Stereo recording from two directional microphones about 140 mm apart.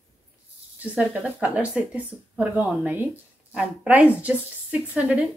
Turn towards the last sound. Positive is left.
turn(degrees=-10)  # may be behind; listen again after turning